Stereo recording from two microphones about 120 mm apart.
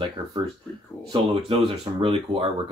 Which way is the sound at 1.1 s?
45° right (ahead or behind).